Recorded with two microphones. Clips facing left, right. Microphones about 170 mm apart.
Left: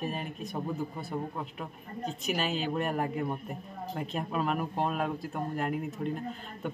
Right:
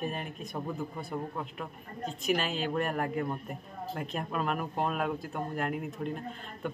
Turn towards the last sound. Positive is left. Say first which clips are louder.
# left 1 dB
turn(degrees=0)  # may be behind; listen again after turning